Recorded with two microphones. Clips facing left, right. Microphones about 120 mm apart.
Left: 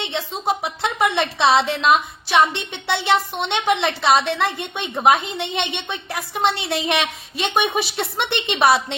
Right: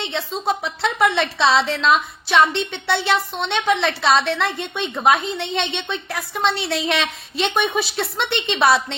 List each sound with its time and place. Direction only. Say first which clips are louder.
0.0 s a woman's voice: right 1 dB; 15° left (ahead or behind)